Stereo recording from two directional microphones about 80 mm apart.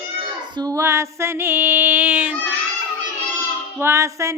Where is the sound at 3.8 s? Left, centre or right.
Right.